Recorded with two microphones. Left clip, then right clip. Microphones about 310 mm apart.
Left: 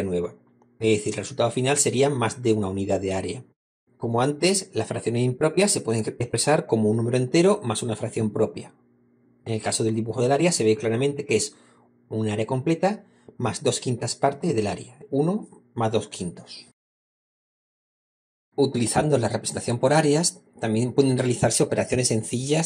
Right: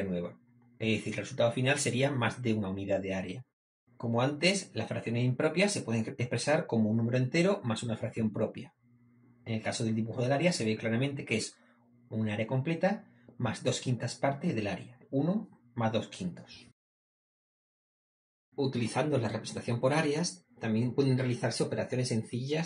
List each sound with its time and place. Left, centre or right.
0.7 s speech: left
18.5 s speech: left